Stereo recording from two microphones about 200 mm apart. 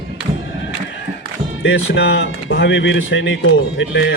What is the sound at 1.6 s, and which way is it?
A man's voice, 70° left (ahead or behind).